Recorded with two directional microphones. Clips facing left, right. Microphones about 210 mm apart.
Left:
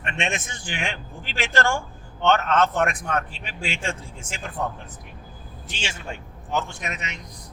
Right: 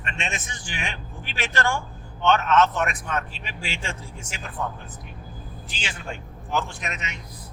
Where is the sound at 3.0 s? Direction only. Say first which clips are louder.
Left 2 dB; 55° left (ahead or behind).